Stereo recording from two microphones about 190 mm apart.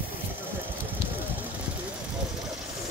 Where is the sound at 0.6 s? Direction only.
10° right (ahead or behind).